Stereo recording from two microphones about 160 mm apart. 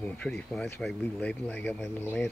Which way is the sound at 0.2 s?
5° left (ahead or behind).